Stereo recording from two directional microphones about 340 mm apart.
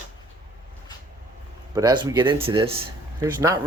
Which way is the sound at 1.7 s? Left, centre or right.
Centre.